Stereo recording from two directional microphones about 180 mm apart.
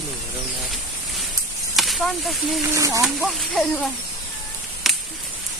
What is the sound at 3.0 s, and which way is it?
Speech, centre (ahead or behind).